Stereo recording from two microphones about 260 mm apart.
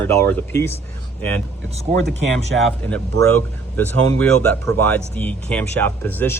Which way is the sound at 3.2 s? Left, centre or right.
Centre.